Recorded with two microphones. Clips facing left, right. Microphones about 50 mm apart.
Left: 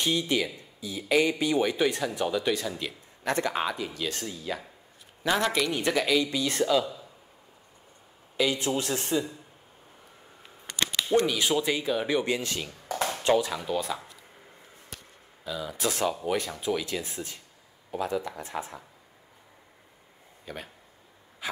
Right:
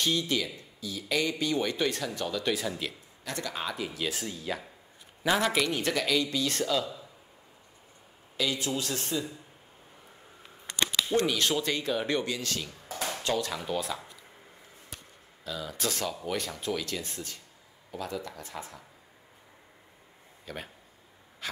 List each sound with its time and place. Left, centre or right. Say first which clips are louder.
0.0 s speech: left 2 dB; centre
2.4 s speech: left 2 dB; centre
3.3 s speech: left 8 dB; left
3.7 s speech: left 1 dB; centre
8.4 s speech: left 4 dB; left
11.2 s speech: left 2 dB; centre
12.3 s speech: left 4 dB; left
13.4 s speech: left 3 dB; centre
15.4 s speech: left 3 dB; centre
16.0 s speech: left 5 dB; left
16.3 s speech: left 3 dB; centre; by 18.8 s left
20.5 s speech: left 1 dB; centre